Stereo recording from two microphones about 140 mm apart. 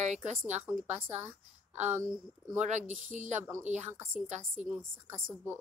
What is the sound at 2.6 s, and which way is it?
Speech, 55° right (ahead or behind).